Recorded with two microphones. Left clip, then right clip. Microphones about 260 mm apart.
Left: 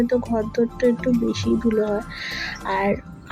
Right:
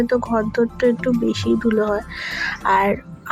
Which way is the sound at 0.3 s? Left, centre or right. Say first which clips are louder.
Right 3 dB; centre.